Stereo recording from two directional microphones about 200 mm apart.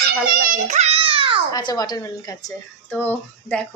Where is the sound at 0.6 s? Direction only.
35° right (ahead or behind).